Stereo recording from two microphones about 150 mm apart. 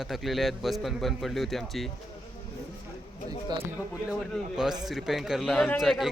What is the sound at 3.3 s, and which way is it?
Speech, 30° right (ahead or behind).